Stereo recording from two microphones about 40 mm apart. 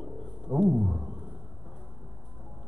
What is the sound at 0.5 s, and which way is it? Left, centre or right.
Roaring cats, centre.